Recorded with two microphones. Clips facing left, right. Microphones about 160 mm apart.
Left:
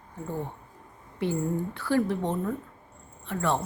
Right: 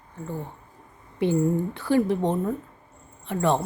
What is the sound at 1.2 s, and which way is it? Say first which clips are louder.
Speech: right 6 dB; 20° right (ahead or behind).